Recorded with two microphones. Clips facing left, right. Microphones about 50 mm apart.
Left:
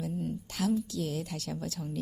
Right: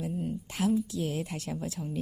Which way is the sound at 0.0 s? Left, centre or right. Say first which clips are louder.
Right 1 dB; right.